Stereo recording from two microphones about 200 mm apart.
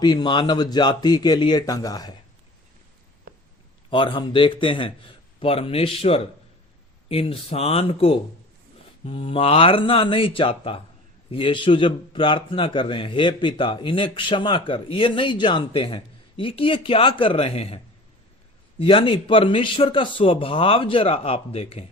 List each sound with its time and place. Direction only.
0.0 s speech: 20° left (ahead or behind)
3.8 s speech: 25° left (ahead or behind)
18.8 s speech: 25° left (ahead or behind)